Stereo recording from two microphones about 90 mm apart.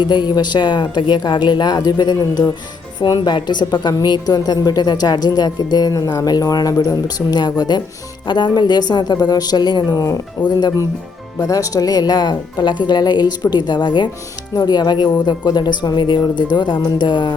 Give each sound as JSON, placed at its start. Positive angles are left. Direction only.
{"t": 0.0, "sound": "a woman's voice", "side_deg": 55}
{"t": 9.8, "sound": "a woman's voice", "side_deg": 40}